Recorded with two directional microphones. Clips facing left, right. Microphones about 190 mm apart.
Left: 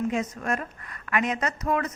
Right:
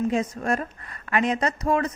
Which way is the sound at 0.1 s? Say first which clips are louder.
Right 3 dB; 30° right (ahead or behind).